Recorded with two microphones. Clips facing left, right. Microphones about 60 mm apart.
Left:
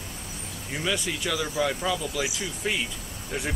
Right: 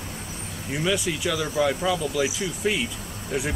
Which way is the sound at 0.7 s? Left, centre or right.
Centre.